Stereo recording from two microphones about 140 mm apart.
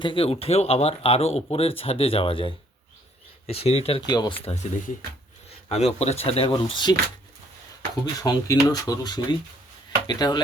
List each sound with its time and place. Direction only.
0.0 s speech: 35° left (ahead or behind)
4.0 s speech: 30° left (ahead or behind)
8.0 s speech: 30° left (ahead or behind)